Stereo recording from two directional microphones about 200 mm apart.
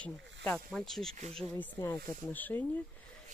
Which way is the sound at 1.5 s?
15° left (ahead or behind).